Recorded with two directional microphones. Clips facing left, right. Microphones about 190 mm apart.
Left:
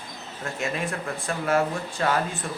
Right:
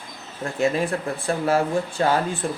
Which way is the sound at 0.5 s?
35° right (ahead or behind).